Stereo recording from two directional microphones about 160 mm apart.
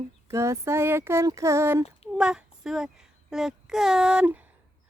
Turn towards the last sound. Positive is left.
turn(degrees=-10)  # may be behind; listen again after turning